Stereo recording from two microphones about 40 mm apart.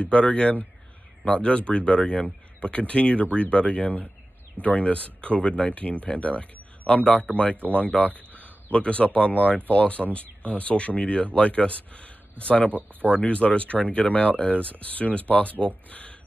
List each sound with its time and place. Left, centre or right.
0.0 s speech: left
7.7 s speech: left
8.1 s speech: right
8.7 s speech: left